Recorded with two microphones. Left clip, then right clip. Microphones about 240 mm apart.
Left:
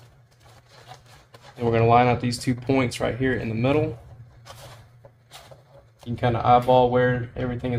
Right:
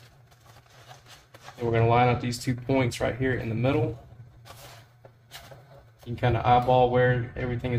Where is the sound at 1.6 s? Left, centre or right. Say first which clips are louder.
Left 4 dB; left.